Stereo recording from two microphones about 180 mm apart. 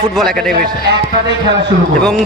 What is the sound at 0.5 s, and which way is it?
Speech, 60° right (ahead or behind).